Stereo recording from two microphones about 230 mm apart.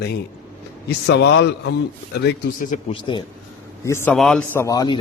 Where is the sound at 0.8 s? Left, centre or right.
Left.